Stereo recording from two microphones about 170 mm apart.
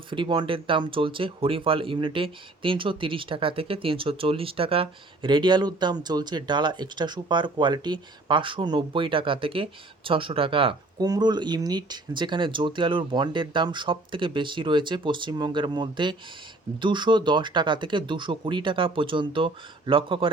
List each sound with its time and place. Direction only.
0.1 s speech: 30° right (ahead or behind)